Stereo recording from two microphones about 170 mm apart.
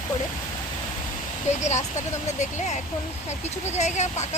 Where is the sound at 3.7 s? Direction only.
45° left (ahead or behind).